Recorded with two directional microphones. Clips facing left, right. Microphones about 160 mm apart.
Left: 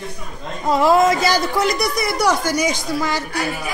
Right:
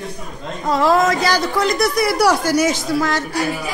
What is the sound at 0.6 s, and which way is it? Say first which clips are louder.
Speech: left 1 dB; 10° left (ahead or behind).